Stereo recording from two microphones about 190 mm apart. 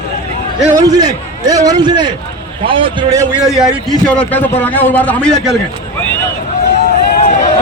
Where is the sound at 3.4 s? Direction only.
Centre (ahead or behind).